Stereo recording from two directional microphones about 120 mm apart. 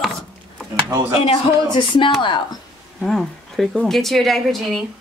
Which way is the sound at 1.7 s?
45° left (ahead or behind).